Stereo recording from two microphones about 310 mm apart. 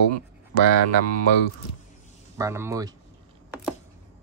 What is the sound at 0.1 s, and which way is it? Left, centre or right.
Speech, right.